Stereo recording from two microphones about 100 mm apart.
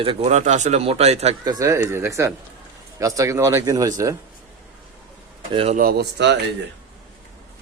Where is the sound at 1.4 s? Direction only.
35° right (ahead or behind).